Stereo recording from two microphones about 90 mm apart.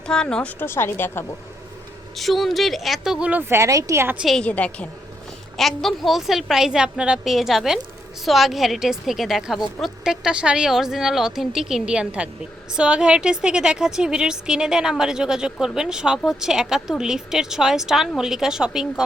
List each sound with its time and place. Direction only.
0.1 s a woman's voice: 5° left (ahead or behind)
0.6 s a woman's voice: 25° left (ahead or behind)
2.1 s a woman's voice: centre (ahead or behind)
3.5 s a woman's voice: 35° right (ahead or behind)
4.4 s a woman's voice: 15° left (ahead or behind)
5.5 s a woman's voice: centre (ahead or behind)